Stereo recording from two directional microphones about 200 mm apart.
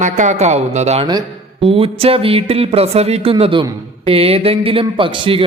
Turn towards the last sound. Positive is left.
turn(degrees=-25)  # may be behind; listen again after turning